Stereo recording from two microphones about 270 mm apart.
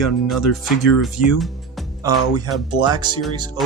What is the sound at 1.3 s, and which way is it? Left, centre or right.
Music, centre.